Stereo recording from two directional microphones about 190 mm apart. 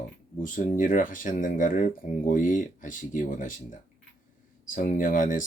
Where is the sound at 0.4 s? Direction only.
45° left (ahead or behind).